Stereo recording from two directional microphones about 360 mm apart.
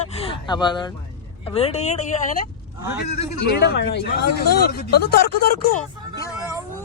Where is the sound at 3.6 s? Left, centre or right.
Left.